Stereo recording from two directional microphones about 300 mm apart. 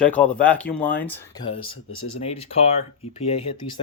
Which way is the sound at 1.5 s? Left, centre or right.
Centre.